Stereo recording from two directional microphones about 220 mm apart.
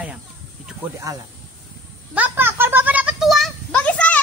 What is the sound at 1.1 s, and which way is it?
Speech, 15° right (ahead or behind).